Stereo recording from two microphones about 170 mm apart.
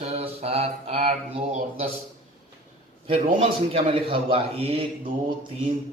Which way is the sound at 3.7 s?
30° right (ahead or behind).